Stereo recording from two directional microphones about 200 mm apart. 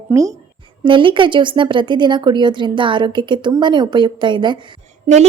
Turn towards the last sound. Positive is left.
turn(degrees=-30)  # may be behind; listen again after turning